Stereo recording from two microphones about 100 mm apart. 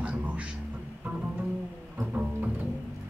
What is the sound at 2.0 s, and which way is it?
Double bass, 15° right (ahead or behind).